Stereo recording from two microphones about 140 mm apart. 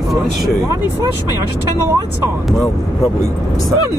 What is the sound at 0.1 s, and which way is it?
Speech, centre (ahead or behind).